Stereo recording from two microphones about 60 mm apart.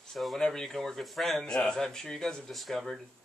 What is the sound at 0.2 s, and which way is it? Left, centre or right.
Speech, centre.